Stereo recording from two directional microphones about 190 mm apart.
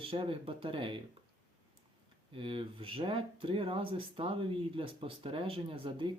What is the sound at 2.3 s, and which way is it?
Speech, 30° right (ahead or behind).